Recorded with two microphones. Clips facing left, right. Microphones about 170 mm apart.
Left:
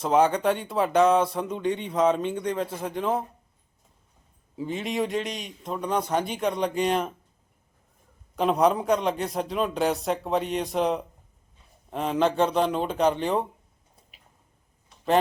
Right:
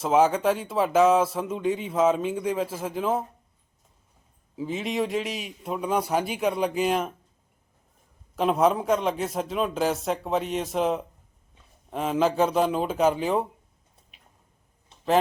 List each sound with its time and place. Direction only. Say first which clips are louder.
0.0 s speech: even; centre (ahead or behind)
4.5 s speech: right 1 dB; centre (ahead or behind)
8.4 s speech: even; centre (ahead or behind)